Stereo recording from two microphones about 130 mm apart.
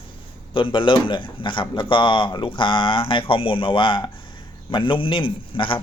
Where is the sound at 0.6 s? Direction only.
40° left (ahead or behind).